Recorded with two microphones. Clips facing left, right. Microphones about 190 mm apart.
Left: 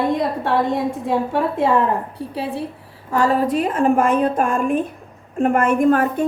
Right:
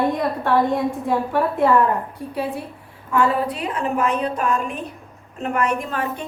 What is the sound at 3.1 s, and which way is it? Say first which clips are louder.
A woman's voice: left 3 dB; 40° left (ahead or behind).